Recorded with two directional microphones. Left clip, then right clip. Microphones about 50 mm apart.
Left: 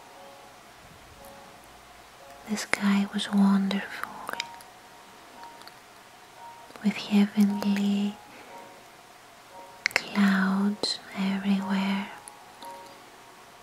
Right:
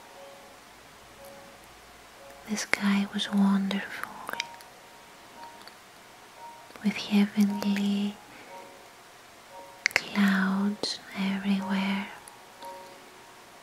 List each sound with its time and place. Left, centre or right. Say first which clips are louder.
2.4 s speech: even; centre
6.7 s speech: left 1 dB; centre
9.8 s whispering: even; centre